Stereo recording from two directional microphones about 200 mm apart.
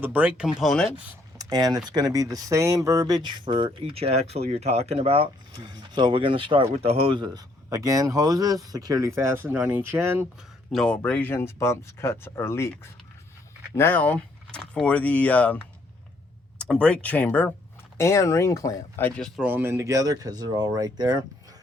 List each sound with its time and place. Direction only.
0.0 s speech: 10° right (ahead or behind)
1.4 s speech: 20° right (ahead or behind)
10.7 s speech: 5° left (ahead or behind)
16.6 s speech: 5° left (ahead or behind)
19.4 s speech: 10° right (ahead or behind)